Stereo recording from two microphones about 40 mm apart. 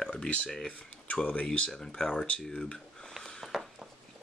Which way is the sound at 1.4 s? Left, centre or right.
Left.